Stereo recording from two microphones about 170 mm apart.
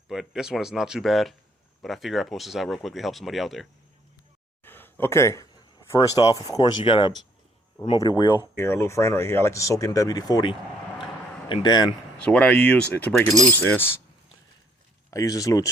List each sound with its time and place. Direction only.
0.1 s speech: 5° right (ahead or behind)
4.6 s a sound: 10° left (ahead or behind)
5.9 s speech: 20° left (ahead or behind)
8.5 s speech: 15° left (ahead or behind)
12.2 s speech: 10° left (ahead or behind)
15.1 s speech: 20° left (ahead or behind)